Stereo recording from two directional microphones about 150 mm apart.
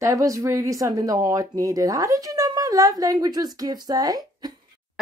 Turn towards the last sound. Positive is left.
turn(degrees=-25)  # may be behind; listen again after turning